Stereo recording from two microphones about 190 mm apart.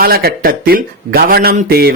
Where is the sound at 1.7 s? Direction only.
55° right (ahead or behind).